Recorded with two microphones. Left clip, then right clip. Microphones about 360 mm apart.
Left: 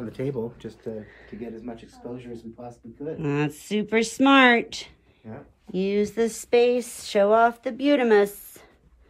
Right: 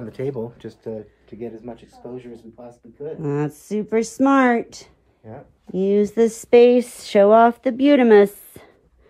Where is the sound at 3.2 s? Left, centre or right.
Centre.